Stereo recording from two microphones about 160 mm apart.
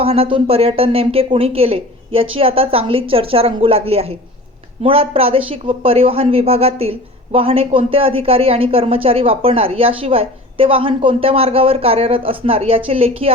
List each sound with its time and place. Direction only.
0.0 s speech: 35° right (ahead or behind)